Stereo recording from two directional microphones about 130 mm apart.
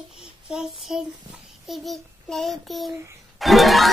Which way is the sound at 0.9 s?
5° right (ahead or behind).